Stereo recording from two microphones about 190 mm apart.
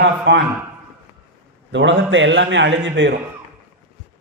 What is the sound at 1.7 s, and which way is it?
A man's voice, 75° right (ahead or behind).